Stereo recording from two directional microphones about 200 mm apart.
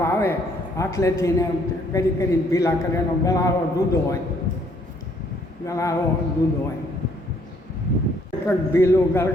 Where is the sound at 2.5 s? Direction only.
15° left (ahead or behind).